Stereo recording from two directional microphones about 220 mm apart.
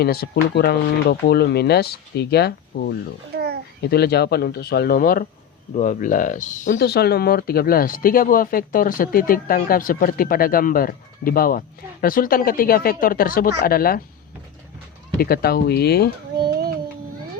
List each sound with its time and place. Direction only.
0.0 s speech: 45° left (ahead or behind)
3.3 s babbling: 45° right (ahead or behind)
3.8 s speech: 45° left (ahead or behind)
6.7 s speech: 45° left (ahead or behind)
15.2 s speech: 45° left (ahead or behind)
16.4 s child singing: 40° right (ahead or behind)